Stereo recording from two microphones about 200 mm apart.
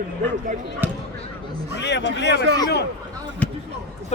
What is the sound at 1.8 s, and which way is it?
Speech, 60° left (ahead or behind).